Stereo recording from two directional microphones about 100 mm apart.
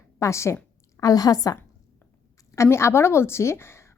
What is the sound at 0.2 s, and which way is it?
A woman's voice, 30° left (ahead or behind).